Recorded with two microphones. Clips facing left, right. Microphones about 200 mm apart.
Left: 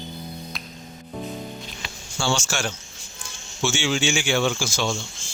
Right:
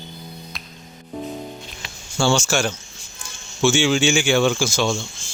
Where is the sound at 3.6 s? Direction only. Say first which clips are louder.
Right 6 dB; 65° right (ahead or behind).